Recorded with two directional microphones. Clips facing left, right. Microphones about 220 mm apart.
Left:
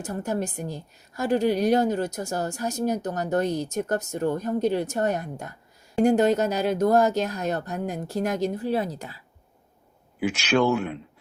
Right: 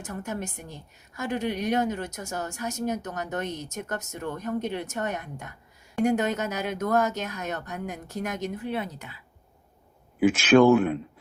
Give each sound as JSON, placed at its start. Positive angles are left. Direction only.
{"t": 0.0, "sound": "a woman's voice", "side_deg": 35}
{"t": 10.2, "sound": "speech", "side_deg": -50}